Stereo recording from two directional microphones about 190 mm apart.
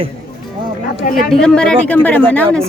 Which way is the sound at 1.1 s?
Centre (ahead or behind).